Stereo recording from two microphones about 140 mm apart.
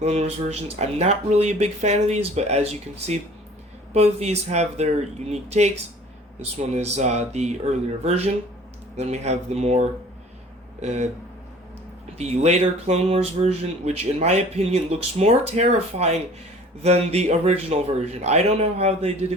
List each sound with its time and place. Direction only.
0.0 s speech: 50° right (ahead or behind)
3.9 s speech: 50° right (ahead or behind)
12.1 s speech: 50° right (ahead or behind)